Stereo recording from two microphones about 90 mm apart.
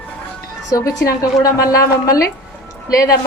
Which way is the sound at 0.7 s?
45° left (ahead or behind).